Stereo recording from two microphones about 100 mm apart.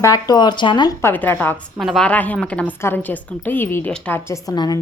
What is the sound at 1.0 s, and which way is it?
Speech, 20° left (ahead or behind).